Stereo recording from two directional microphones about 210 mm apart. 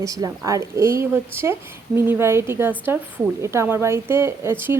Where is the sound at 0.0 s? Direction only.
15° right (ahead or behind).